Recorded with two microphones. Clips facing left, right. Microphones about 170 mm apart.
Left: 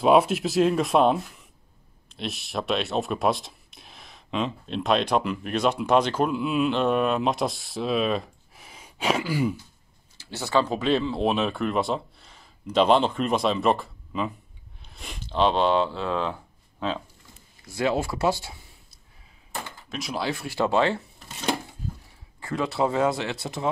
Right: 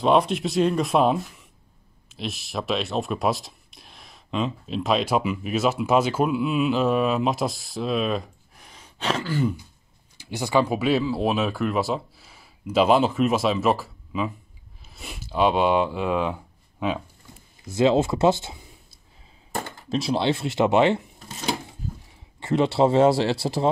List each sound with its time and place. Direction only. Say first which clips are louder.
0.0 s speech: left 1 dB; 5° left (ahead or behind)
10.1 s speech: right 2 dB; 15° right (ahead or behind)
17.6 s speech: right 6 dB; 20° right (ahead or behind)
19.9 s speech: right 7 dB; 30° right (ahead or behind)
22.4 s speech: right 6 dB; 25° right (ahead or behind)